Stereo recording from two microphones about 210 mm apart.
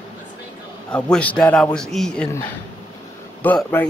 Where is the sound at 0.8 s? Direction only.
5° left (ahead or behind).